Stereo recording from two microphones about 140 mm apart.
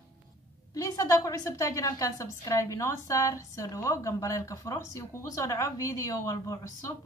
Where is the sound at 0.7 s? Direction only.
25° left (ahead or behind).